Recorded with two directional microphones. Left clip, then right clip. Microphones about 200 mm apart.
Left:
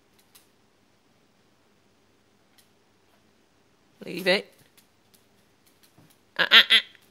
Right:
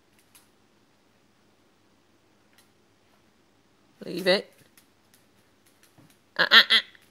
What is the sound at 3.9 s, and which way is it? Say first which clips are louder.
Speech: even; 5° right (ahead or behind).